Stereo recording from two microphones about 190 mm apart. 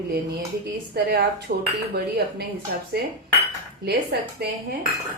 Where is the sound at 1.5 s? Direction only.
50° right (ahead or behind).